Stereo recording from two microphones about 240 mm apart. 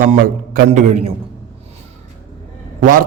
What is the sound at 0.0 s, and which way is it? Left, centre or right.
A man's voice, right.